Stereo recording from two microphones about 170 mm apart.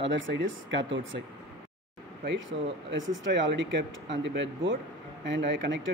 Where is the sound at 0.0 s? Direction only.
90° right.